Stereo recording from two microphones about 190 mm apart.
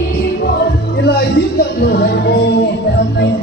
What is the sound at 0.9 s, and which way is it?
Speech, 60° left (ahead or behind).